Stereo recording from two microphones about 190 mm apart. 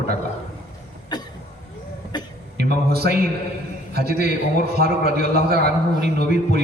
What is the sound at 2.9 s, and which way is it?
A man's voice, 55° right (ahead or behind).